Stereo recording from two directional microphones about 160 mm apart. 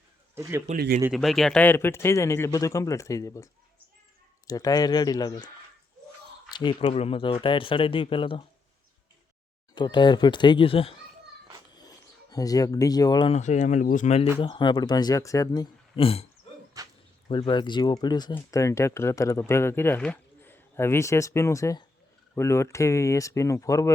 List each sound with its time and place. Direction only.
0.7 s speech: 45° right (ahead or behind)
1.1 s speech: centre (ahead or behind); by 5.5 s 25° left (ahead or behind)
6.5 s speech: 30° left (ahead or behind)
9.7 s speech: 30° left (ahead or behind)
11.8 s speech: 25° left (ahead or behind)
13.3 s speech: 50° left (ahead or behind)
14.3 s speech: 30° left (ahead or behind)
16.8 s dog: 20° right (ahead or behind)
17.2 s speech: 30° left (ahead or behind)